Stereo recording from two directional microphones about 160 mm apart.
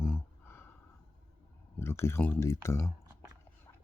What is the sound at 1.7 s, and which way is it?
Speech, 15° left (ahead or behind).